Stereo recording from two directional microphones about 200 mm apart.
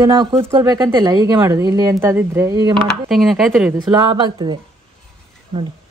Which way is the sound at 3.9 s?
20° right (ahead or behind).